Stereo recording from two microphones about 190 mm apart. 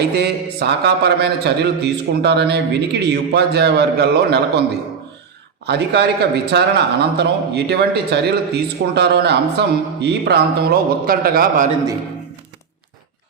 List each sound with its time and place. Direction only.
0.0 s a man's voice: 60° right (ahead or behind)
5.6 s a man's voice: 60° right (ahead or behind)